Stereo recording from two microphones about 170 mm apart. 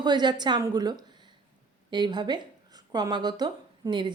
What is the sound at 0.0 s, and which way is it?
A woman's voice, 25° right (ahead or behind).